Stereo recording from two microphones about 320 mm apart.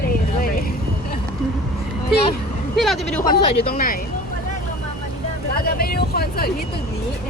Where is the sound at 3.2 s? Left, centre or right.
Left.